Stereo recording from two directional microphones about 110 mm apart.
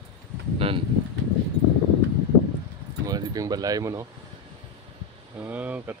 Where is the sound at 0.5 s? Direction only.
60° right (ahead or behind).